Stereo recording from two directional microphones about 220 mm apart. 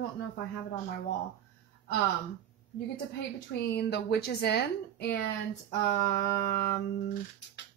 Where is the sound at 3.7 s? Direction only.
50° left (ahead or behind).